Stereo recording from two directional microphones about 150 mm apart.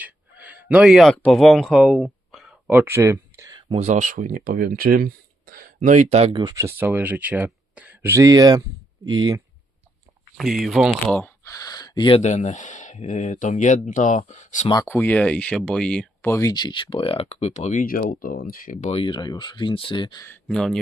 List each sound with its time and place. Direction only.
0.0 s a sound: 10° right (ahead or behind)
2.6 s speech: 15° right (ahead or behind)
3.8 s speech: 55° right (ahead or behind)
6.3 s speech: 25° right (ahead or behind)
10.3 s speech: centre (ahead or behind)
11.1 s a sound: 15° left (ahead or behind); by 12.2 s 30° left (ahead or behind)
12.2 s speech: 50° left (ahead or behind)
14.8 s speech: 10° left (ahead or behind); by 17.8 s 50° left (ahead or behind)
17.8 s speech: 70° left (ahead or behind)
18.9 s speech: 35° left (ahead or behind)
20.2 s speech: 10° left (ahead or behind)